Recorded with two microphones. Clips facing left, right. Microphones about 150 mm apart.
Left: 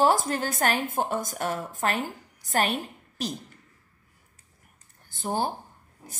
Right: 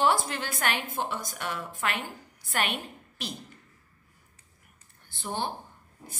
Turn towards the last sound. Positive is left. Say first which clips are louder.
# left 5 dB
turn(degrees=40)  # may be behind; listen again after turning